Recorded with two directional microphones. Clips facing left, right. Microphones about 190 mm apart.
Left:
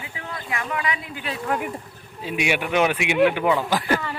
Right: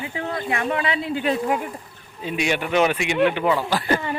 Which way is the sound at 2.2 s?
10° left (ahead or behind).